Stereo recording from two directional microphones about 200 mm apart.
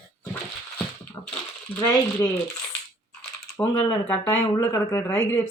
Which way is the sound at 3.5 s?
15° left (ahead or behind).